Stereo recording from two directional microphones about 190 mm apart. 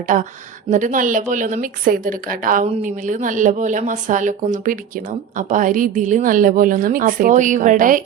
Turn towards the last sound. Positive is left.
turn(degrees=-45)  # may be behind; listen again after turning